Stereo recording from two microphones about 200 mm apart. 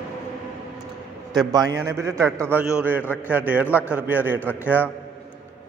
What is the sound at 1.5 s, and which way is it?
A man's voice, 20° right (ahead or behind).